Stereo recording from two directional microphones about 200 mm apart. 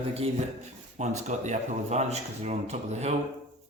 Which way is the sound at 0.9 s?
35° right (ahead or behind).